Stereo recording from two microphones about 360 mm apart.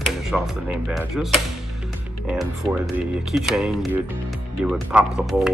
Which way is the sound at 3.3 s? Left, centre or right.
Centre.